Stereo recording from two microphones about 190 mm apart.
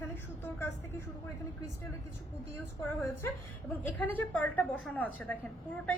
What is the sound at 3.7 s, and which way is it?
A woman's voice, 10° left (ahead or behind).